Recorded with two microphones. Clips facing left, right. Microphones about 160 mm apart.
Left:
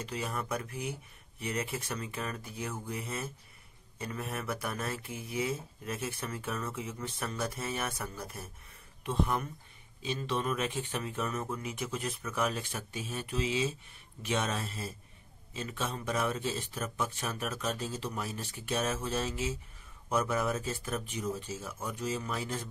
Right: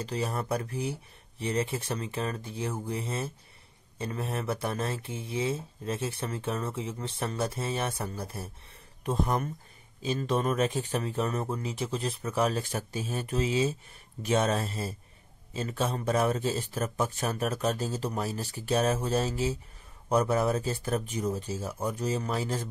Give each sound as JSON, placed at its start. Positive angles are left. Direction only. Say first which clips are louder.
{"t": 0.0, "sound": "speech", "louder": "right 5 dB", "side_deg": -35}